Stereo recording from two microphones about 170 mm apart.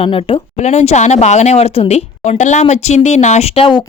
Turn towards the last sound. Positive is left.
turn(degrees=30)  # may be behind; listen again after turning